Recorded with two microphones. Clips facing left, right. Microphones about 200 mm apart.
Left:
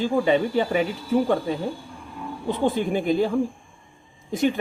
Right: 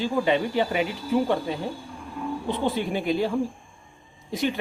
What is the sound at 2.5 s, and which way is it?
Speech, 45° left (ahead or behind).